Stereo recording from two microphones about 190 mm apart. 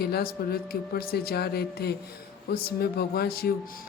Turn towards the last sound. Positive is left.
turn(degrees=55)  # may be behind; listen again after turning